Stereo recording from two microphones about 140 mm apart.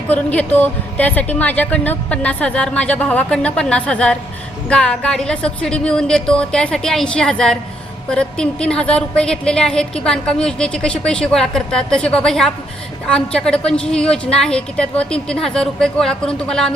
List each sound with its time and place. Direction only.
0.1 s a woman's voice: 10° left (ahead or behind)